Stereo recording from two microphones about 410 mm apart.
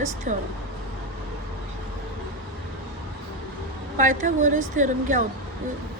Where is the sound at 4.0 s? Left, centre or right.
Centre.